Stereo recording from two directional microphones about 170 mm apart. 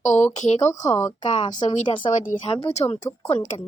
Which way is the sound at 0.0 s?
45° left (ahead or behind).